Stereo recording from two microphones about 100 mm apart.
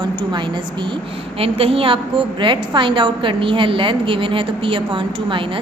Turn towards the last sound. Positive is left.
turn(degrees=-55)  # may be behind; listen again after turning